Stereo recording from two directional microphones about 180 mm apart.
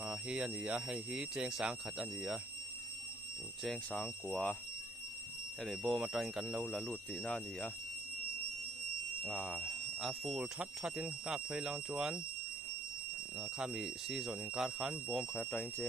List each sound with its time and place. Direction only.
0.0 s speech: 5° right (ahead or behind)
3.6 s speech: centre (ahead or behind)
5.6 s speech: centre (ahead or behind)
9.2 s speech: 5° left (ahead or behind)
13.4 s speech: 5° right (ahead or behind)